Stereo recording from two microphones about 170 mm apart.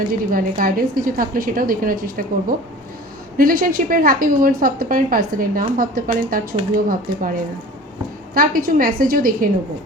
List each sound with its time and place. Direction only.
0.3 s a woman's voice: 55° right (ahead or behind)